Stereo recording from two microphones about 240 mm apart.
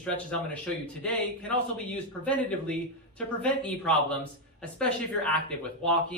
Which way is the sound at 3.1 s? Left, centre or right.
Centre.